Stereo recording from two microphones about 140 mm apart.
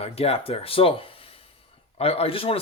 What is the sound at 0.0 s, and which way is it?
Speech, 45° left (ahead or behind).